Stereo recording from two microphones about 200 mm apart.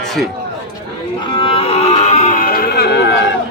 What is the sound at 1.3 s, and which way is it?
Music, 25° left (ahead or behind).